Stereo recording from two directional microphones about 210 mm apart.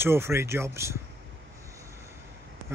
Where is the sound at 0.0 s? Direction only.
10° right (ahead or behind).